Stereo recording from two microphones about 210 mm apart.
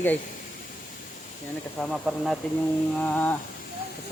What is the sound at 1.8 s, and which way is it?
Speech, centre (ahead or behind).